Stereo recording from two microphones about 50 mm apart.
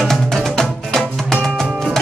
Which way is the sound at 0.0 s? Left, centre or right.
Centre.